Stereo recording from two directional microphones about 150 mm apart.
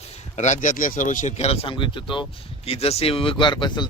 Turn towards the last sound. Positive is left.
turn(degrees=30)  # may be behind; listen again after turning